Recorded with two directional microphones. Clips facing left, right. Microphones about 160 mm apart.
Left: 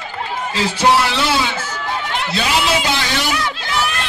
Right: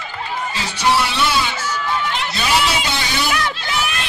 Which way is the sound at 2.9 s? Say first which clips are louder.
Left 2 dB; 90° left.